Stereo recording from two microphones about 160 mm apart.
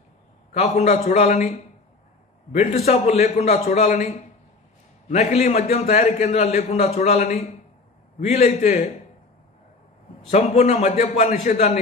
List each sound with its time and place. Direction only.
0.5 s a man's voice: 40° left (ahead or behind)
10.3 s a man's voice: 45° left (ahead or behind)